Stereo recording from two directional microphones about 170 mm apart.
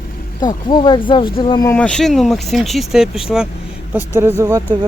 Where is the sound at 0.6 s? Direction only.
25° left (ahead or behind).